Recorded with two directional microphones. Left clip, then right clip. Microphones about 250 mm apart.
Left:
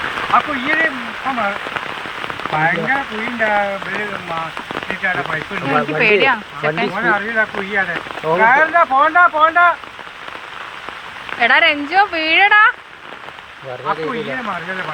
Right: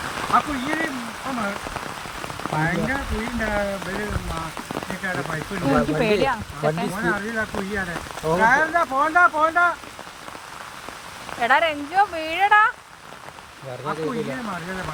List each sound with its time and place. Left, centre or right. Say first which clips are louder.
0.0 s speech: left 5 dB; centre
2.6 s speech: left 8 dB; centre
5.0 s speech: left 9 dB; centre
11.3 s speech: left 7 dB; centre
13.8 s speech: left 6 dB; right